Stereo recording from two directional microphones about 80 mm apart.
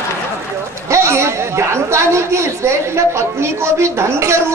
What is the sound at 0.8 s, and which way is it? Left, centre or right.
A woman's voice, right.